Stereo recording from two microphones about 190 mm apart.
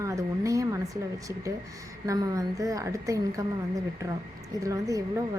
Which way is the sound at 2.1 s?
15° right (ahead or behind).